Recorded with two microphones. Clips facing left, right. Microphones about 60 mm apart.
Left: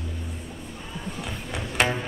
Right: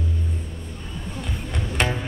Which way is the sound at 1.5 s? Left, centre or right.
Centre.